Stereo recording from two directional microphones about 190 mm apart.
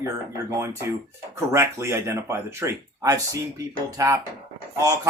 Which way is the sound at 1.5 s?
15° right (ahead or behind).